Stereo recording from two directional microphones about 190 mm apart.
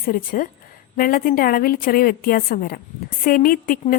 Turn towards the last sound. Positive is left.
turn(degrees=50)  # may be behind; listen again after turning